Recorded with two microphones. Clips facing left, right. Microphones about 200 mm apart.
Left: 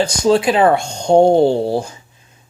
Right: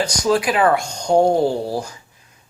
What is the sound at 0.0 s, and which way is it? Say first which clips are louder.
Speech: left 4 dB; 25° left (ahead or behind).